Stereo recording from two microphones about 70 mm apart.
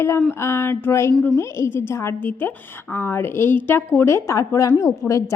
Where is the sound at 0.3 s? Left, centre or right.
Left.